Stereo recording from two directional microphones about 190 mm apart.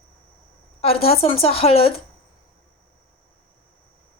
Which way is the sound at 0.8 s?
30° left (ahead or behind).